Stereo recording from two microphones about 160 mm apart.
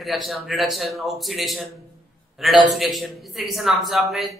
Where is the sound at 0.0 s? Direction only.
Centre (ahead or behind).